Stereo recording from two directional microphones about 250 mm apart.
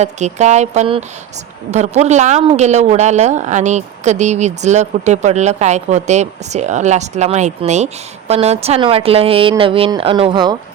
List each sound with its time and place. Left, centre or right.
0.0 s a woman's voice: right